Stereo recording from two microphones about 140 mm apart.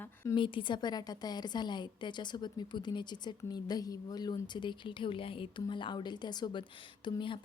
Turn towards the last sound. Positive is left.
turn(degrees=35)  # may be behind; listen again after turning